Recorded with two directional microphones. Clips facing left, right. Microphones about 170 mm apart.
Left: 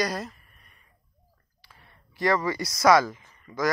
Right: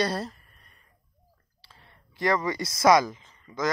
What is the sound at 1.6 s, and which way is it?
Speech, 20° right (ahead or behind).